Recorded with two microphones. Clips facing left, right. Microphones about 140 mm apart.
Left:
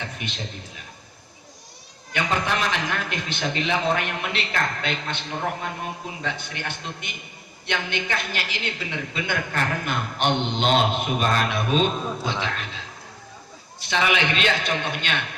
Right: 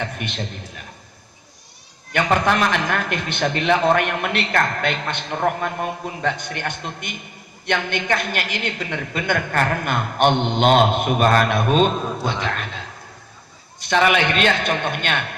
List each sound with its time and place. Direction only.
0.0 s a sound: 55° right (ahead or behind)
2.1 s a woman's voice: 55° right (ahead or behind)
13.8 s a man's voice: 55° right (ahead or behind)